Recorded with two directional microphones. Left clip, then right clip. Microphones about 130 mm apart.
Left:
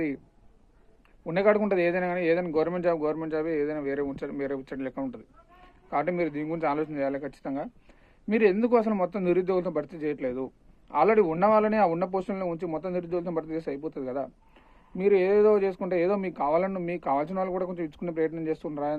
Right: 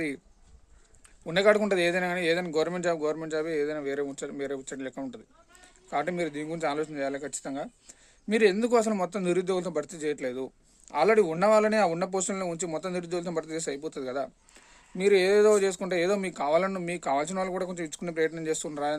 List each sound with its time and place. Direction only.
1.2 s a man's voice: 30° right (ahead or behind)